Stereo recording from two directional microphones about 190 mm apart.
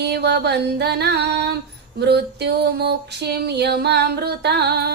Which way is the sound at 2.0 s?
60° right (ahead or behind).